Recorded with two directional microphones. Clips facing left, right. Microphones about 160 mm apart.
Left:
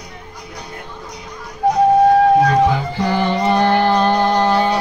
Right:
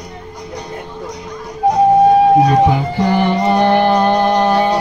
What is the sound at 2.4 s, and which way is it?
Music, 20° right (ahead or behind).